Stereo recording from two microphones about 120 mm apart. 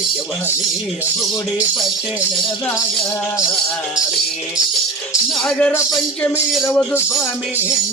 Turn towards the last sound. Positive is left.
turn(degrees=20)  # may be behind; listen again after turning